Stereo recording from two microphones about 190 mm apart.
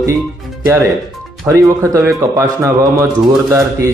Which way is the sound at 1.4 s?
15° right (ahead or behind).